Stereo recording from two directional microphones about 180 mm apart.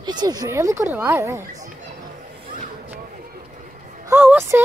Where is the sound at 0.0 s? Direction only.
25° right (ahead or behind).